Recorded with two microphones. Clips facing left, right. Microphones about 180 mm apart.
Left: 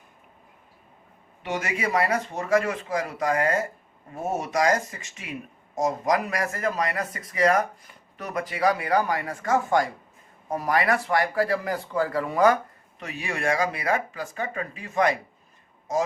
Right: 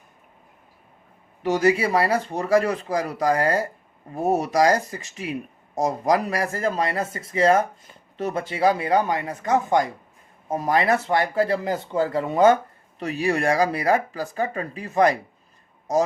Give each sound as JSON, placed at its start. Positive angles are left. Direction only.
{"t": 1.4, "sound": "speech", "side_deg": -35}
{"t": 13.0, "sound": "speech", "side_deg": -35}